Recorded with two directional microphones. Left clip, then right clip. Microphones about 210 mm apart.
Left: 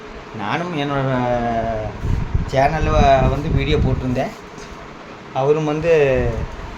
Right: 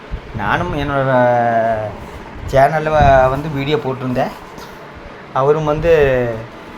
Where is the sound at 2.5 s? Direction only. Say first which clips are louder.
Right 5 dB; 15° right (ahead or behind).